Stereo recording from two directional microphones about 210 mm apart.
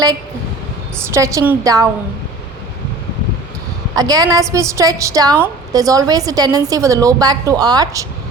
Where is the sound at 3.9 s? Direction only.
15° right (ahead or behind).